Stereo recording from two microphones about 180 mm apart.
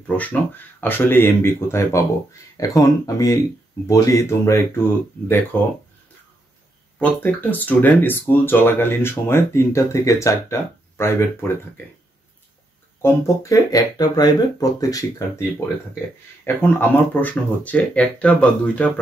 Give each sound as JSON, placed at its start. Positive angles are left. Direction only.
{"t": 0.0, "sound": "speech", "side_deg": 10}
{"t": 7.0, "sound": "speech", "side_deg": 10}
{"t": 13.0, "sound": "speech", "side_deg": 15}
{"t": 16.4, "sound": "speech", "side_deg": 10}